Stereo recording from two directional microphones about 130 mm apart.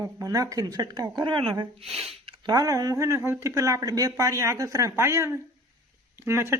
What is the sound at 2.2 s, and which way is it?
Speech, 30° right (ahead or behind).